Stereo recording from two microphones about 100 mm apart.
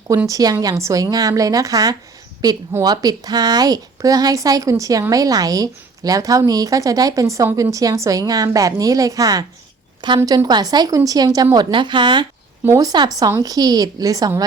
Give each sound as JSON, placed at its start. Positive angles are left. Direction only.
{"t": 0.3, "sound": "a woman's voice", "side_deg": -35}
{"t": 11.5, "sound": "speech", "side_deg": -50}
{"t": 12.6, "sound": "a woman's voice", "side_deg": -35}